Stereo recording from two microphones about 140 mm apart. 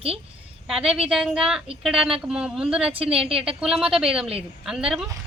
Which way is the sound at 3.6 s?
5° right (ahead or behind).